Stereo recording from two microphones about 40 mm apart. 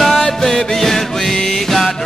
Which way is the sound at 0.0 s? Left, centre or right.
Centre.